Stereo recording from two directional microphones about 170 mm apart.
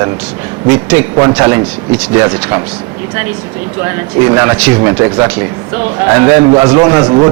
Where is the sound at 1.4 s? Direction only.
15° right (ahead or behind).